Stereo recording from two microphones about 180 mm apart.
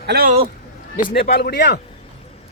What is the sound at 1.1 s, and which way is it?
Speech, 60° left (ahead or behind).